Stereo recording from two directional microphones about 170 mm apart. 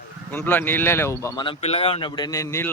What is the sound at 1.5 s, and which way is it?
A man's voice, 35° left (ahead or behind).